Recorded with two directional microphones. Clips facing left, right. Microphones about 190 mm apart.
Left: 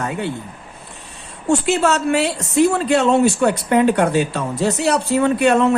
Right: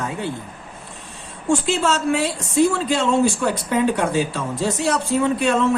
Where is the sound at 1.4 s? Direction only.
65° left (ahead or behind).